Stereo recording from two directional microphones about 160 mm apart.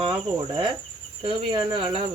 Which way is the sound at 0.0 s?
30° right (ahead or behind).